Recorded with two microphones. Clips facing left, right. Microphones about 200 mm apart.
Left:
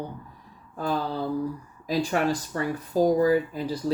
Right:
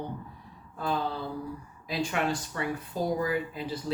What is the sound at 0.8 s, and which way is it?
Speech, 40° left (ahead or behind).